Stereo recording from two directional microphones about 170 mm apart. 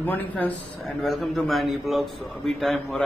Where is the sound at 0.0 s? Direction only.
10° left (ahead or behind).